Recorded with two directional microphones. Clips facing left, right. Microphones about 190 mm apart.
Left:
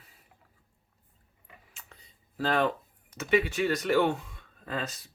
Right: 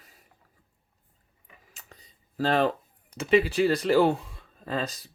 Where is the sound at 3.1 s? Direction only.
30° right (ahead or behind).